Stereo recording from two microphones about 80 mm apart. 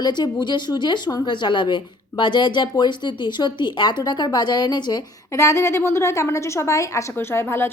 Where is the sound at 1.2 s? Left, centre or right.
Left.